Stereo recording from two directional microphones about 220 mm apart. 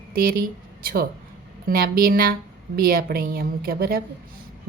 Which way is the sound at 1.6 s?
40° right (ahead or behind).